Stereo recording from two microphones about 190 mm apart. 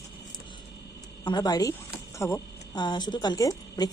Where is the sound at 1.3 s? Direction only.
20° left (ahead or behind).